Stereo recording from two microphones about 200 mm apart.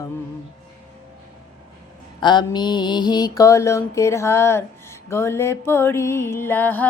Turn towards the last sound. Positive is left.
turn(degrees=10)  # may be behind; listen again after turning